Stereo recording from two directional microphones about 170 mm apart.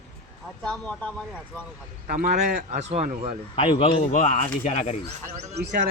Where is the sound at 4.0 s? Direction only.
45° left (ahead or behind).